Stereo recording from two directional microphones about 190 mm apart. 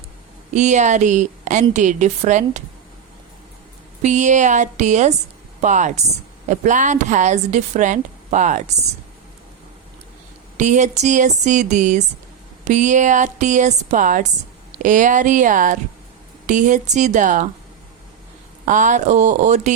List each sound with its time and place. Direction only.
0.5 s speech: 40° right (ahead or behind)
4.0 s speech: 40° right (ahead or behind)
10.6 s speech: 40° right (ahead or behind)
18.6 s speech: 40° right (ahead or behind)